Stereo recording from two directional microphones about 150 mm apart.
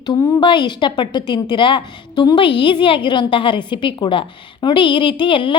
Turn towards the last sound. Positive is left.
turn(degrees=35)  # may be behind; listen again after turning